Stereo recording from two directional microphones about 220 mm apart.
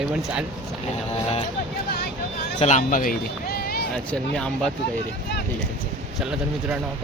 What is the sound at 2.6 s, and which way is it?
Speech, 35° left (ahead or behind).